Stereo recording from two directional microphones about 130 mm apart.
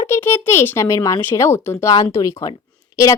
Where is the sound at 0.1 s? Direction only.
15° left (ahead or behind).